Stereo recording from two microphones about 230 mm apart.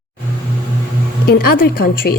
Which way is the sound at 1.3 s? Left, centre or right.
Left.